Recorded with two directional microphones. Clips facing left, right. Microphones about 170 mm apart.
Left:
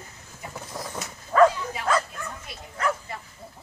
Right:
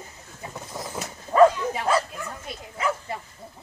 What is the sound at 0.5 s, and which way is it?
Vehicle, centre (ahead or behind).